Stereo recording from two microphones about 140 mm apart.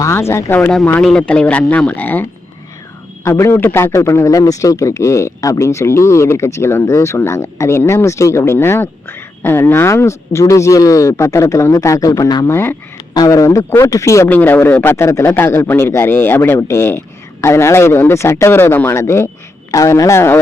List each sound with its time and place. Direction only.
0.0 s a man's voice: 20° left (ahead or behind)
3.2 s a man's voice: 20° left (ahead or behind)